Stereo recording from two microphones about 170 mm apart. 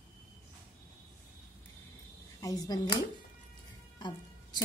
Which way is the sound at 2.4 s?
20° left (ahead or behind).